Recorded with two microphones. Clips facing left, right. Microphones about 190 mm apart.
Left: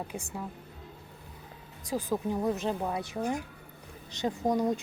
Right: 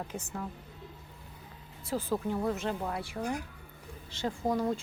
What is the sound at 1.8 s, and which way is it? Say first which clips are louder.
A woman's voice: left 1 dB; 15° left (ahead or behind).